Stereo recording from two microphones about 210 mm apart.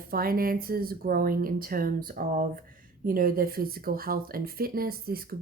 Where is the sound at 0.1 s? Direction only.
45° right (ahead or behind).